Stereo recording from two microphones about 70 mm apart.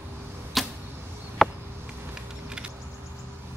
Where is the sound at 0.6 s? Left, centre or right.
Centre.